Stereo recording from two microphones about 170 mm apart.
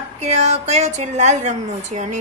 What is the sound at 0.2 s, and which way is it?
A woman's voice, 40° right (ahead or behind).